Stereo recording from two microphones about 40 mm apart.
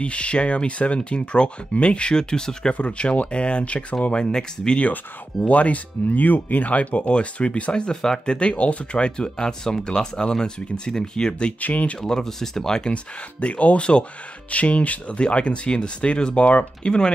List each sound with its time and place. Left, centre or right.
0.0 s speech: left
2.7 s speech: left
5.5 s speech: left
7.7 s speech: centre
8.4 s speech: left
11.6 s speech: left
12.0 s speech: centre
12.9 s speech: left